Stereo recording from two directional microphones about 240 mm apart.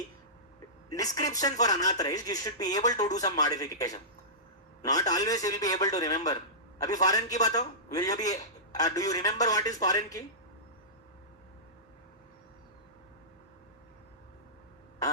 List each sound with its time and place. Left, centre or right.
0.9 s a man's voice: centre